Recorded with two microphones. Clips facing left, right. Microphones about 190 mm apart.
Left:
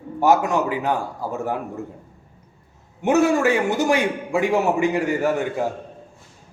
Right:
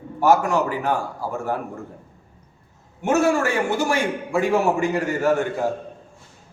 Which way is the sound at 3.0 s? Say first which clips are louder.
Left 2 dB; 15° left (ahead or behind).